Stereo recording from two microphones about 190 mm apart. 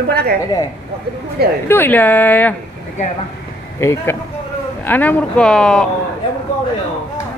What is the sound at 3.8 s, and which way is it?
A woman's voice, 15° left (ahead or behind).